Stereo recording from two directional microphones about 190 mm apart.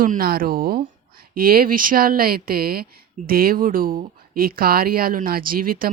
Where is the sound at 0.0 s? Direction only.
50° right (ahead or behind).